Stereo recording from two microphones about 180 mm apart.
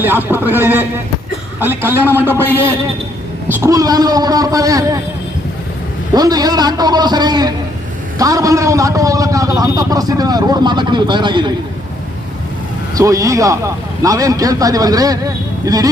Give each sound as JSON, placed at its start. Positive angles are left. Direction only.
{"t": 0.0, "sound": "speech", "side_deg": -10}
{"t": 3.5, "sound": "a man's voice", "side_deg": -15}
{"t": 6.1, "sound": "a man's voice", "side_deg": -20}
{"t": 13.0, "sound": "a man's voice", "side_deg": -20}